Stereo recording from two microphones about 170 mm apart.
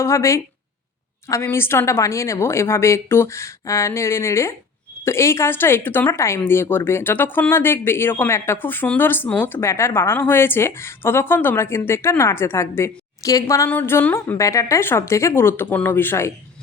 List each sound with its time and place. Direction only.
0.0 s speech: 15° left (ahead or behind)